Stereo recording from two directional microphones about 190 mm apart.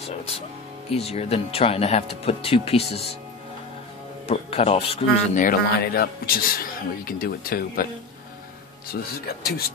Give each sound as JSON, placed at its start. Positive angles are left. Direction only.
{"t": 0.3, "sound": "speech", "side_deg": 35}
{"t": 4.3, "sound": "speech", "side_deg": 30}
{"t": 5.4, "sound": "a man's voice", "side_deg": 50}
{"t": 8.9, "sound": "speech", "side_deg": 60}